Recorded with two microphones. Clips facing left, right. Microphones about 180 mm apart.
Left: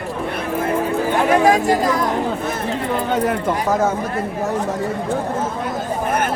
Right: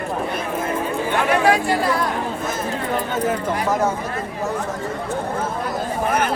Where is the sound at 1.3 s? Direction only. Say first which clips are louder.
Left 3 dB; 45° left (ahead or behind).